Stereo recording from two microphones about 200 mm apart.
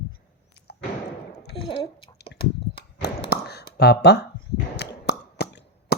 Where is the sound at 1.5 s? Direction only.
25° left (ahead or behind).